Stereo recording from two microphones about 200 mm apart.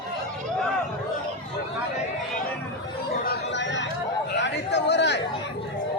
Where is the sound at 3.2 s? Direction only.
60° left (ahead or behind).